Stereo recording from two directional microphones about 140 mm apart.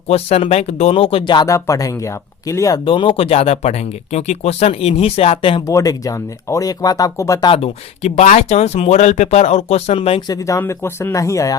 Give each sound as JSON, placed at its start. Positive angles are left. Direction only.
{"t": 0.1, "sound": "speech", "side_deg": 45}
{"t": 2.8, "sound": "speech", "side_deg": 40}
{"t": 5.6, "sound": "speech", "side_deg": 25}
{"t": 7.5, "sound": "speech", "side_deg": 50}
{"t": 10.2, "sound": "speech", "side_deg": 25}